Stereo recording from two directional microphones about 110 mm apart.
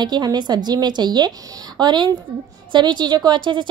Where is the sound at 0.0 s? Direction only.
40° right (ahead or behind).